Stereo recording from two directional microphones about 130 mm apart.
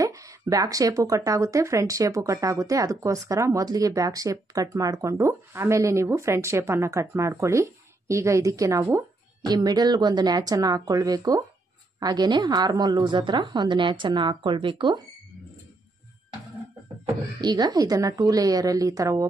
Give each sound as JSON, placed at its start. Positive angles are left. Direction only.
{"t": 0.0, "sound": "a woman's voice", "side_deg": -25}
{"t": 17.4, "sound": "speech", "side_deg": -30}